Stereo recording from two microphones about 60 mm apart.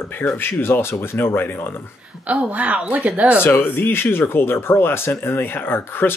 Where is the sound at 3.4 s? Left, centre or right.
Left.